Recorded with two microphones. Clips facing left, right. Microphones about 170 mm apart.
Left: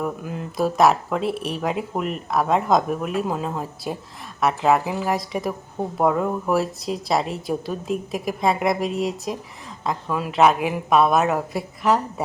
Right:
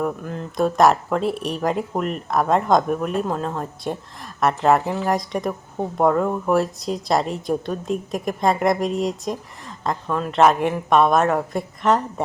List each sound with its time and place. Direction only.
0.0 s a woman's voice: 5° left (ahead or behind)